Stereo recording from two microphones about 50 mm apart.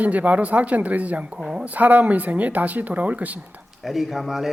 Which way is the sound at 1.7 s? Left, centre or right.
Right.